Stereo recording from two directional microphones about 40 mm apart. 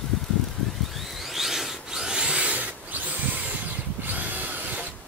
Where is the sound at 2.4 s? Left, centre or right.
Right.